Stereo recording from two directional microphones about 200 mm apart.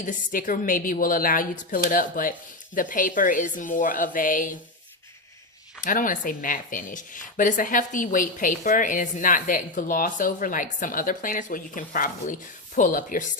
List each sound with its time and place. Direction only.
0.0 s a woman's voice: 40° left (ahead or behind)
5.8 s speech: 40° left (ahead or behind)